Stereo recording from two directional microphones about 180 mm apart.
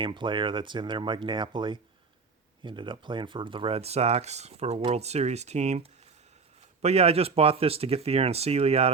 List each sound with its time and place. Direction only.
0.0 s speech: 25° right (ahead or behind)